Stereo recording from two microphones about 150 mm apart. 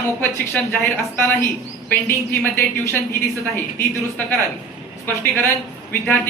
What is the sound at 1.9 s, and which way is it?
Speech, 15° left (ahead or behind).